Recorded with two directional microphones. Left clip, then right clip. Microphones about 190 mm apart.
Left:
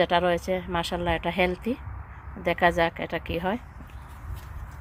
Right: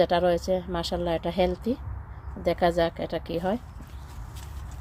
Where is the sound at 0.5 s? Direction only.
15° right (ahead or behind).